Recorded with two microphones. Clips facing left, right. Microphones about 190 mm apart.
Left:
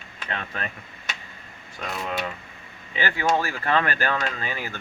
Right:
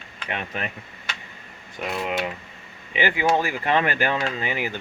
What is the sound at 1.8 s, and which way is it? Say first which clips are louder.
Speech: right 3 dB; 20° right (ahead or behind).